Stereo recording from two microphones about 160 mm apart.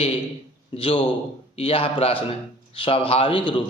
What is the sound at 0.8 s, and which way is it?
Speech, 35° left (ahead or behind).